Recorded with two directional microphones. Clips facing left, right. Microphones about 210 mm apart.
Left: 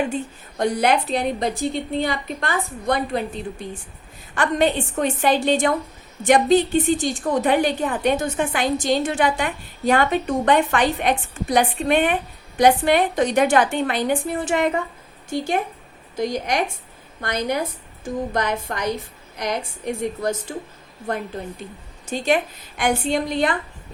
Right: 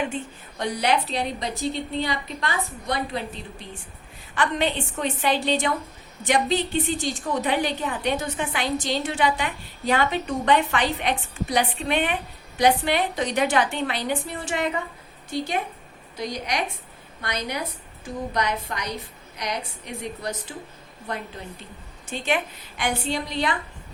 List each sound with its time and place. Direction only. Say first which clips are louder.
0.6 s a woman's voice: left 5 dB; 50° left (ahead or behind)
4.4 s a woman's voice: left 5 dB; 45° left (ahead or behind)
22.0 s a woman's voice: left 5 dB; 40° left (ahead or behind)